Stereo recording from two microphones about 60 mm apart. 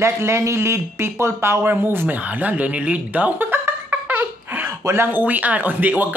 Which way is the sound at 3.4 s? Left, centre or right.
Right.